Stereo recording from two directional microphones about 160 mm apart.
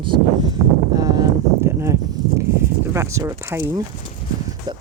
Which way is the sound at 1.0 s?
25° right (ahead or behind).